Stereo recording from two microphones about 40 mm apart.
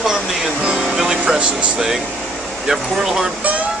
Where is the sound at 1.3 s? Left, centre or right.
Right.